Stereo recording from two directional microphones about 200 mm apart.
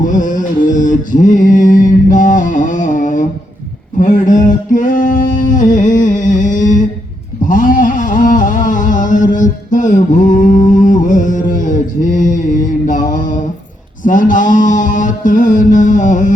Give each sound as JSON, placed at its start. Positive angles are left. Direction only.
{"t": 0.0, "sound": "carnatic music", "side_deg": 40}
{"t": 0.6, "sound": "mantra", "side_deg": 40}
{"t": 3.9, "sound": "male singing", "side_deg": 40}
{"t": 5.7, "sound": "a sound", "side_deg": 40}
{"t": 14.0, "sound": "mantra", "side_deg": 40}